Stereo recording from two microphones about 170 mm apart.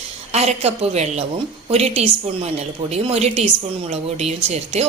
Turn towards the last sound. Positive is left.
turn(degrees=-40)  # may be behind; listen again after turning